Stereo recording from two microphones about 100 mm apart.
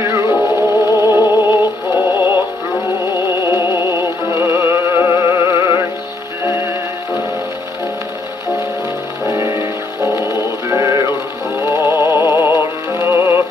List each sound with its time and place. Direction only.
0.0 s music: 30° right (ahead or behind)
0.4 s music: 30° left (ahead or behind)
1.1 s music: 25° right (ahead or behind)
9.3 s music: 25° right (ahead or behind)